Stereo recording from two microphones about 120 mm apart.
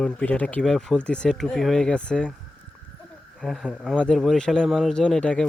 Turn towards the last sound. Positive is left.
turn(degrees=10)  # may be behind; listen again after turning